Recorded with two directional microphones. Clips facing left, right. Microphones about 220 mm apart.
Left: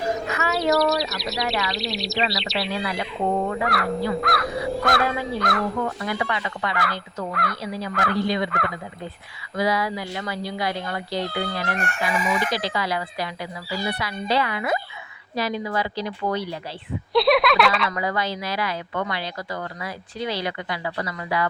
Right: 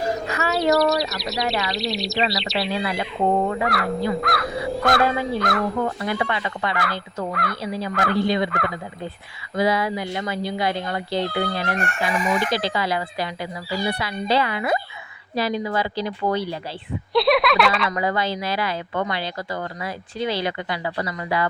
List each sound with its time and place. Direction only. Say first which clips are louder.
0.3 s a sound: right 1 dB; 35° right (ahead or behind)
0.5 s speech: right 2 dB; centre (ahead or behind)
2.7 s speech: right 2 dB; 25° right (ahead or behind)
3.6 s speech: right 1 dB; centre (ahead or behind)
6.1 s speech: right 2 dB; 25° right (ahead or behind)
6.7 s speech: right 1 dB; centre (ahead or behind)
9.6 s speech: right 2 dB; 25° right (ahead or behind)
11.8 s speech: right 2 dB; centre (ahead or behind)
12.5 s speech: right 2 dB; 25° right (ahead or behind)
17.2 s speech: even; centre (ahead or behind)
17.8 s speech: right 2 dB; 25° right (ahead or behind)